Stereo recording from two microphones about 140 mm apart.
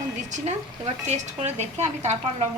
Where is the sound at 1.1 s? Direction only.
55° right (ahead or behind).